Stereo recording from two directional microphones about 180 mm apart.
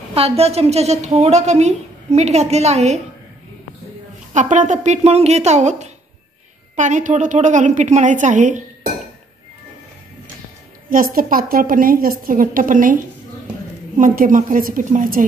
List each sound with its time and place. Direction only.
0.1 s a woman's voice: 35° right (ahead or behind)
4.3 s a woman's voice: 45° right (ahead or behind)
10.9 s a woman's voice: 50° right (ahead or behind)